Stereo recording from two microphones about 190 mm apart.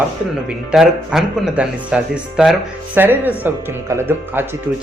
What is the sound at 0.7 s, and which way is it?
Speech, 5° right (ahead or behind).